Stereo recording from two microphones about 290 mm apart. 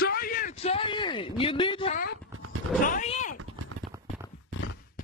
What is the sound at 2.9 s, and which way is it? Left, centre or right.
Cat, left.